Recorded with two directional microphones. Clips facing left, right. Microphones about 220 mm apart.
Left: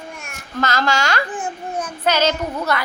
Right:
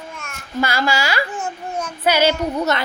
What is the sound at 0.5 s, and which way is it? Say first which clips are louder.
Speech: even; 10° right (ahead or behind).